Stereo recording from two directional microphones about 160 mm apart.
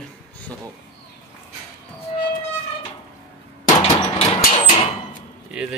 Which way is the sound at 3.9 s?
40° left (ahead or behind).